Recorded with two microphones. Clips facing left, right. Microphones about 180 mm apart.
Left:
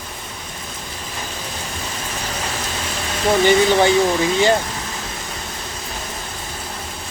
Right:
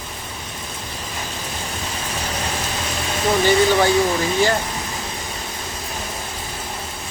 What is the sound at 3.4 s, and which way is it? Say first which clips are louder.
Speech: left 2 dB; 20° left (ahead or behind).